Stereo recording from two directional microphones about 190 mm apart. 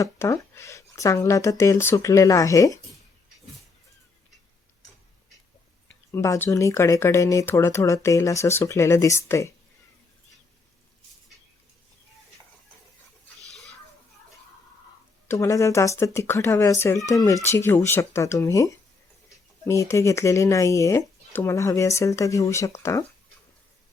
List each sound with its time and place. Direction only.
0.0 s speech: 15° left (ahead or behind)
5.9 s speech: 15° left (ahead or behind)
15.3 s speech: 15° left (ahead or behind)